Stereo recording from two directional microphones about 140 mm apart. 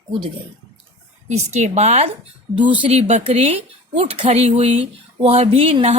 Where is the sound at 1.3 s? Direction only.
55° right (ahead or behind).